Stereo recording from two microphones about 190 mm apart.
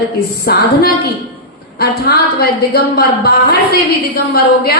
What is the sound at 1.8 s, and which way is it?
A woman's voice, 55° left (ahead or behind).